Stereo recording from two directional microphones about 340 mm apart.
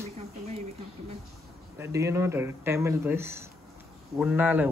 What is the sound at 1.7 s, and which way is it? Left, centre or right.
Speech, centre.